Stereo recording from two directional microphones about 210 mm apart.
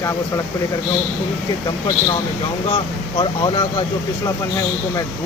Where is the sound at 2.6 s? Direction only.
25° left (ahead or behind).